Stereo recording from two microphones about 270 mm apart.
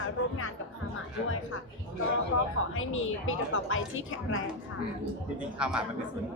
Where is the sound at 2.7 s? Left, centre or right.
Left.